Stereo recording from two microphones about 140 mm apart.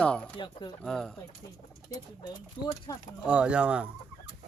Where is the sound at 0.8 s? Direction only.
5° left (ahead or behind).